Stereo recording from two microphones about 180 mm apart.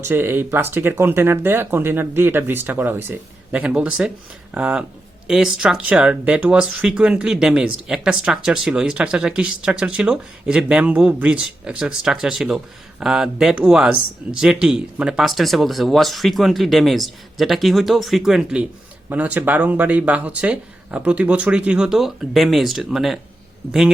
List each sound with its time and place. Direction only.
0.0 s a man's voice: 10° right (ahead or behind)